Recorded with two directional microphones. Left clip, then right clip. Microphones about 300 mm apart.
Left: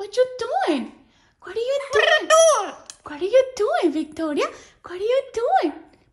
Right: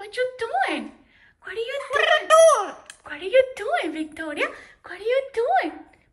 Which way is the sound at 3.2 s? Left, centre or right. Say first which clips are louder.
Left 2 dB; centre.